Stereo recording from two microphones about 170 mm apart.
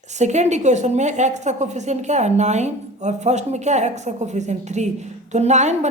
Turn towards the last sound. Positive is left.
turn(degrees=-40)  # may be behind; listen again after turning